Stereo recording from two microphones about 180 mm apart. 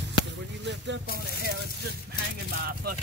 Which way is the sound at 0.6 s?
75° right (ahead or behind).